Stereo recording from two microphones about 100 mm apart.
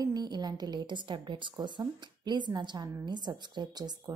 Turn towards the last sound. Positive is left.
turn(degrees=-45)  # may be behind; listen again after turning